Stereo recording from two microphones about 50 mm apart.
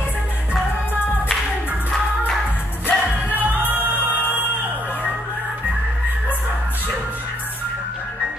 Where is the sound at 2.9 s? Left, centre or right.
Left.